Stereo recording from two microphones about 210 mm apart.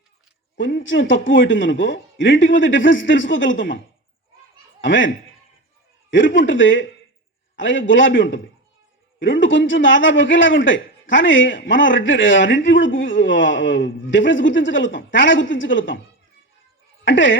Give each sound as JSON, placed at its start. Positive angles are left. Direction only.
{"t": 0.5, "sound": "a man's voice", "side_deg": 60}
{"t": 4.8, "sound": "a man's voice", "side_deg": 65}
{"t": 17.1, "sound": "a man's voice", "side_deg": 60}